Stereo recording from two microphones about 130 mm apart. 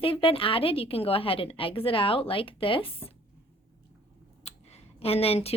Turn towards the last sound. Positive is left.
turn(degrees=50)  # may be behind; listen again after turning